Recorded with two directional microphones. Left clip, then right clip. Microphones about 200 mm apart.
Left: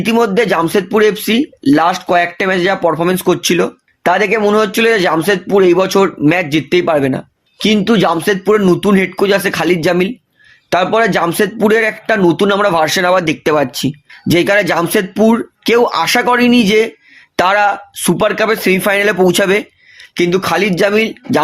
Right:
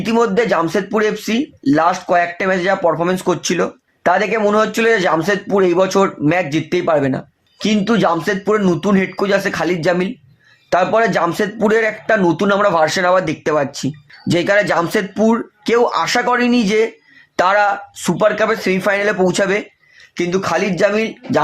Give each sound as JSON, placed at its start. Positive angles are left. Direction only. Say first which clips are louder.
{"t": 0.0, "sound": "speech", "louder": "left 3 dB", "side_deg": 35}